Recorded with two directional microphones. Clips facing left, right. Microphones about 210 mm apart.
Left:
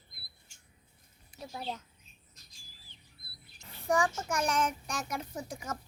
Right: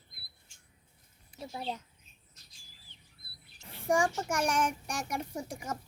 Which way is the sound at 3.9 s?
10° right (ahead or behind).